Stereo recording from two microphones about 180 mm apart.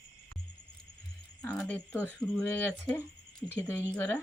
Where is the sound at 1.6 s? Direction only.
10° left (ahead or behind).